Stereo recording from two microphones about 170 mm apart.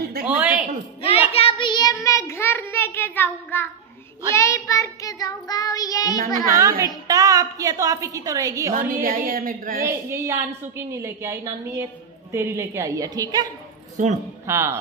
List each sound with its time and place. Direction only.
0.2 s a sound: 10° right (ahead or behind)
1.0 s child singing: 35° left (ahead or behind); by 6.3 s 20° left (ahead or behind)
6.5 s a woman's voice: 20° right (ahead or behind)
9.0 s a woman's voice: 50° right (ahead or behind)
9.8 s a woman's voice: 15° right (ahead or behind)
14.0 s a man's voice: 45° right (ahead or behind)
14.4 s a man's voice: 15° right (ahead or behind)